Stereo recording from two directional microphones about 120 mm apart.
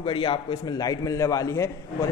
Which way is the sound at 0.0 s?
45° left (ahead or behind).